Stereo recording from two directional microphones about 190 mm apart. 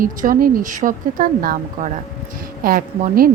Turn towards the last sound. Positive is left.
turn(degrees=-50)  # may be behind; listen again after turning